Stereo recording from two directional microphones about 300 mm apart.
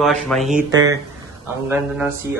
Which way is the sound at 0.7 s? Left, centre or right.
Centre.